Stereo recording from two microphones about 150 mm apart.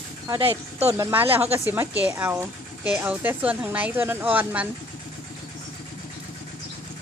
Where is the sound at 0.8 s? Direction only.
20° right (ahead or behind).